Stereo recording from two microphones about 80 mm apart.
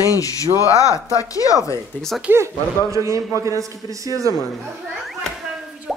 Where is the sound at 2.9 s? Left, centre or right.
Right.